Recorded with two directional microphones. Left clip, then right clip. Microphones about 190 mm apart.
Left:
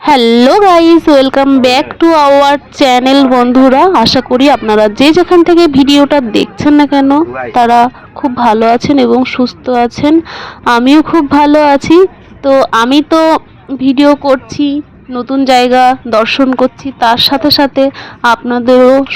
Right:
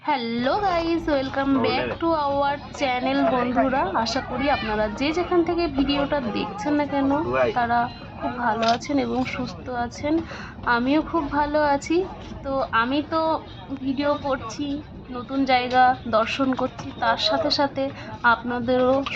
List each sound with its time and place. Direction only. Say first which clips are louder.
0.0 s a woman's voice: left 18 dB; 50° left (ahead or behind)